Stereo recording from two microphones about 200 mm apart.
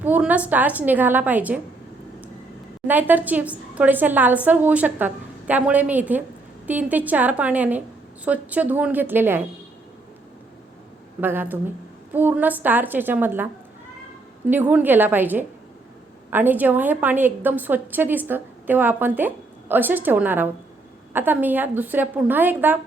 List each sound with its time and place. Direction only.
0.0 s a woman's voice: 10° right (ahead or behind)
2.8 s a woman's voice: 10° right (ahead or behind)
11.2 s a woman's voice: 10° right (ahead or behind)